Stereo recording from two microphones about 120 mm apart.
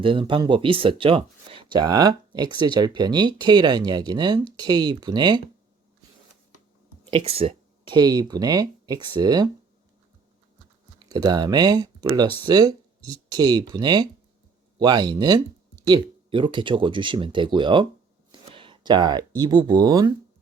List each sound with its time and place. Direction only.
0.0 s speech: 45° right (ahead or behind)
7.1 s a sound: 55° right (ahead or behind)
7.9 s speech: 35° right (ahead or behind)
11.0 s speech: 35° right (ahead or behind)